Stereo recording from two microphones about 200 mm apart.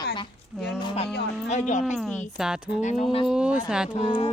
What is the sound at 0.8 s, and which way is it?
Speech, 25° left (ahead or behind).